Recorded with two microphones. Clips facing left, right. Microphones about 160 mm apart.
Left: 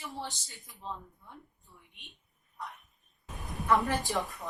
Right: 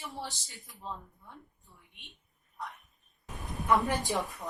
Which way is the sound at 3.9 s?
20° right (ahead or behind).